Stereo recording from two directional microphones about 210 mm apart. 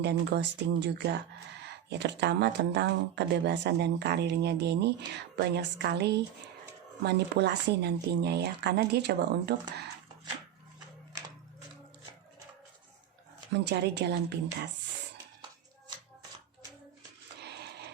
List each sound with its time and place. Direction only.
0.0 s speech: 55° right (ahead or behind)
13.5 s speech: 55° right (ahead or behind)
17.4 s dog: 50° right (ahead or behind)